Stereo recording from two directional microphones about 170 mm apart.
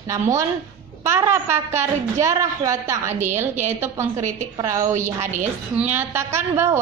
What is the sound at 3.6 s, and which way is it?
A woman's voice, 15° right (ahead or behind).